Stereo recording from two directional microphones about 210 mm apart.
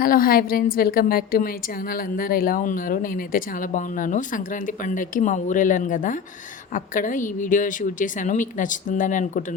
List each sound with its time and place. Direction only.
0.0 s a woman's voice: 45° left (ahead or behind)